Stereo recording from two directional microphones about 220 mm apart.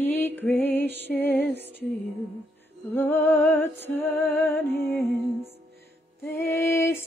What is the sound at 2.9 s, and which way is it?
Music, 10° left (ahead or behind).